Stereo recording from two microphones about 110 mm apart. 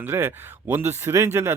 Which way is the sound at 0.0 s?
20° right (ahead or behind).